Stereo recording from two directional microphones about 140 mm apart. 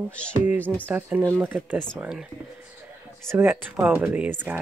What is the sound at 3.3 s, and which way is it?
Speech, 15° right (ahead or behind).